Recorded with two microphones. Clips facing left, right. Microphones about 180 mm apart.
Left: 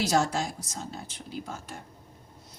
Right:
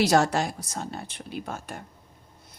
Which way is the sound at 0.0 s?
65° right (ahead or behind).